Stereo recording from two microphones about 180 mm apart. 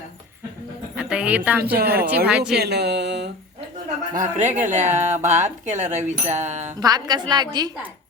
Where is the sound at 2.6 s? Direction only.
70° right (ahead or behind).